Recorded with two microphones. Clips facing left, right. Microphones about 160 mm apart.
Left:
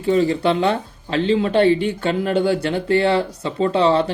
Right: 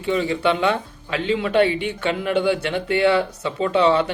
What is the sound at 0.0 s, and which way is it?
Speech, 40° left (ahead or behind).